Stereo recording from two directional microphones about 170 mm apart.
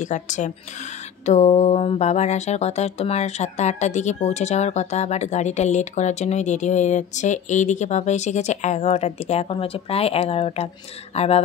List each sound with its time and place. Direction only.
0.0 s speech: 45° left (ahead or behind)
1.2 s mantra: 40° left (ahead or behind)